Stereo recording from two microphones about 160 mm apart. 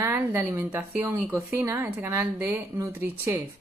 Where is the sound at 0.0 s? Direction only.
15° right (ahead or behind).